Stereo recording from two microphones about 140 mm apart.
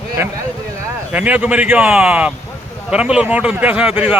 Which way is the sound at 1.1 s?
10° right (ahead or behind).